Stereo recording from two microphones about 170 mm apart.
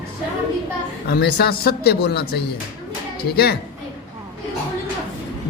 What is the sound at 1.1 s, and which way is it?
Speech, 65° left (ahead or behind).